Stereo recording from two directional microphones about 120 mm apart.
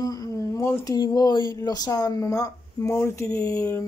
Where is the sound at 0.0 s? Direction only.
30° left (ahead or behind).